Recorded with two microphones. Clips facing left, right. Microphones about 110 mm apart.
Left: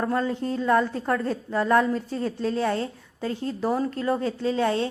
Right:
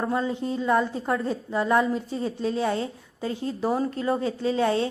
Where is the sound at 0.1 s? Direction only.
10° right (ahead or behind).